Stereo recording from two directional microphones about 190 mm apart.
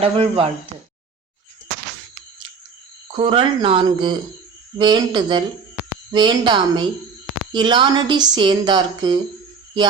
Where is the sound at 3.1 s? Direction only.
25° right (ahead or behind).